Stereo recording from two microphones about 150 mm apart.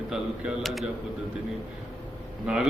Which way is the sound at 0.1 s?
Centre (ahead or behind).